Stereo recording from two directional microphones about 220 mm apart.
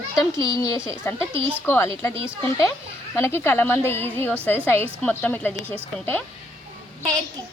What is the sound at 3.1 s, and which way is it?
Speech, 10° left (ahead or behind).